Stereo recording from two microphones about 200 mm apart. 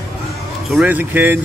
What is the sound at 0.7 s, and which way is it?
Speech, 5° right (ahead or behind).